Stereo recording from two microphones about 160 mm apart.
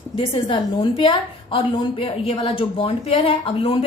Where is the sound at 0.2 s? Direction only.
35° left (ahead or behind).